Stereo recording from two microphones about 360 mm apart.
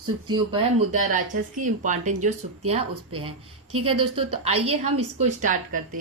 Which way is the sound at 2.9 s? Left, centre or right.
Right.